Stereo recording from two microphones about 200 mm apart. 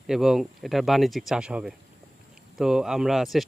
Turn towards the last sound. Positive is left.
turn(degrees=0)  # may be behind; listen again after turning